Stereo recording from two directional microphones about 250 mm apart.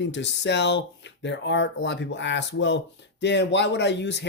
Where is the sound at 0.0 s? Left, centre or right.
Left.